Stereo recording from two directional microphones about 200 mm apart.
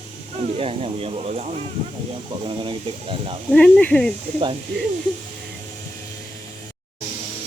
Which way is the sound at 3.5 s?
5° left (ahead or behind).